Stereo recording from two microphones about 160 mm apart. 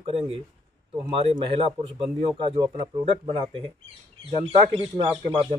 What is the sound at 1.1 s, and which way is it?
Speech, 35° right (ahead or behind).